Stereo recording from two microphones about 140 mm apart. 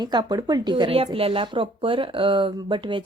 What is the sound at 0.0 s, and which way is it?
A woman's voice, 30° right (ahead or behind).